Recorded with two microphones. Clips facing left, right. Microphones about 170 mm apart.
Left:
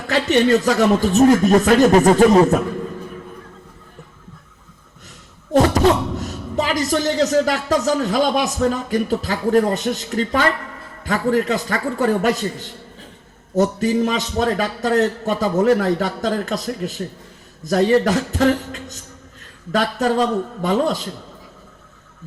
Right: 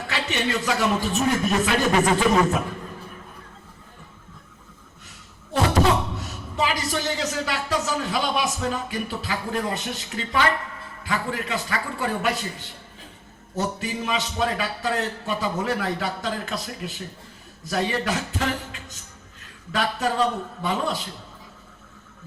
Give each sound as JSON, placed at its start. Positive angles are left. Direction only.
{"t": 0.1, "sound": "a woman's voice", "side_deg": 40}
{"t": 5.5, "sound": "a woman's voice", "side_deg": 40}